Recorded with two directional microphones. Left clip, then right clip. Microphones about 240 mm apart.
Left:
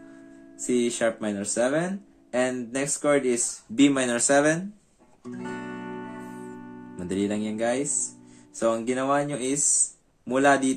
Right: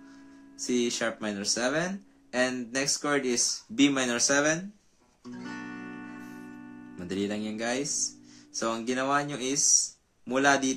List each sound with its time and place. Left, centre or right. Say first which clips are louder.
0.7 s speech: left 4 dB; centre
5.9 s music: left 5 dB; left
7.0 s speech: left 4 dB; centre
8.5 s speech: left 5 dB; centre